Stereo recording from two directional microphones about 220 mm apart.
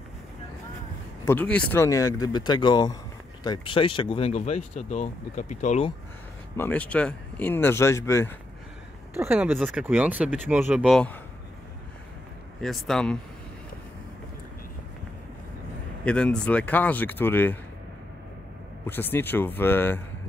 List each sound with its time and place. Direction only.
1.2 s speech: 10° left (ahead or behind); by 5.9 s 35° left (ahead or behind)
6.5 s speech: 10° left (ahead or behind)
9.1 s speech: 10° right (ahead or behind)
12.6 s speech: centre (ahead or behind)
16.1 s speech: 5° left (ahead or behind)
18.9 s speech: 10° left (ahead or behind)